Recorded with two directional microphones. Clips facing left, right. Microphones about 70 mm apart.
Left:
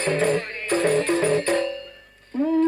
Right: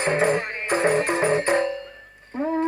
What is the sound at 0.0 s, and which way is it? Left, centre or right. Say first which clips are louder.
Music: right 1 dB; right.